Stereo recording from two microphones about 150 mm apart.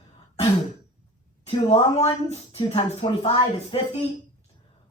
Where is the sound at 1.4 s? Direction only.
40° left (ahead or behind).